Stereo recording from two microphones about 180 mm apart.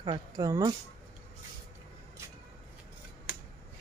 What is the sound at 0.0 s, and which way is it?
Speech, 20° right (ahead or behind).